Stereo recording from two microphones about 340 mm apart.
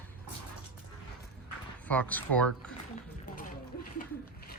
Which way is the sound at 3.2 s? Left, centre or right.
Left.